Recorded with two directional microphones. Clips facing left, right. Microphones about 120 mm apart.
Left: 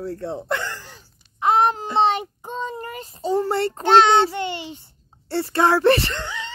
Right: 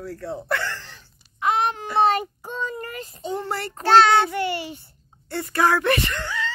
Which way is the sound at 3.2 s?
30° left (ahead or behind).